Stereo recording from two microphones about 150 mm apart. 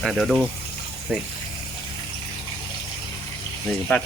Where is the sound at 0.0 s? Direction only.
Centre (ahead or behind).